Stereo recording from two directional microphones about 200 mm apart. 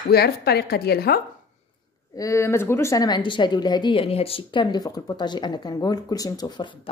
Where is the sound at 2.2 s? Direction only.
15° left (ahead or behind).